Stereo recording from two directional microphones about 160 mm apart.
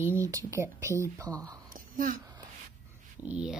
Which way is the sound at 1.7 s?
55° right (ahead or behind).